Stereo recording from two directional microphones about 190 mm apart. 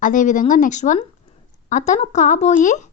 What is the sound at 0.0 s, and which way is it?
Speech, 45° left (ahead or behind).